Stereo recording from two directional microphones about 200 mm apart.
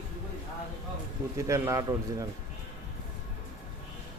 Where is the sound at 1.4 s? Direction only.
15° right (ahead or behind).